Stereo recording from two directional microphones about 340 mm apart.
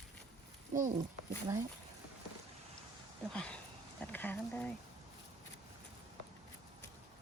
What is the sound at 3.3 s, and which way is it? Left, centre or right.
Speech, centre.